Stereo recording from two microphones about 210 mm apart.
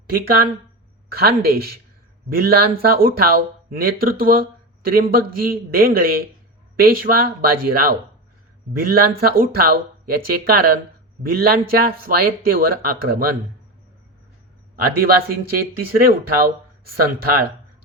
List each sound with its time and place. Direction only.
1.1 s speech: 50° right (ahead or behind)
15.0 s speech: 45° right (ahead or behind)